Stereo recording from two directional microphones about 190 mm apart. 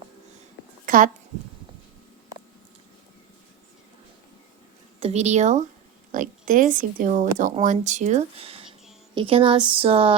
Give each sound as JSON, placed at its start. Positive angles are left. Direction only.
{"t": 0.9, "sound": "speech", "side_deg": -45}
{"t": 4.9, "sound": "speech", "side_deg": -35}